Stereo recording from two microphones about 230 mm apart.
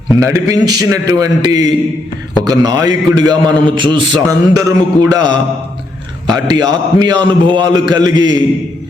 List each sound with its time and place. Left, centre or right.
0.3 s a man's voice: centre
6.5 s a man's voice: centre